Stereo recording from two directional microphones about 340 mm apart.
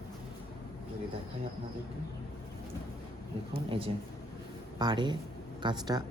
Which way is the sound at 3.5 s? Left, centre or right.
Centre.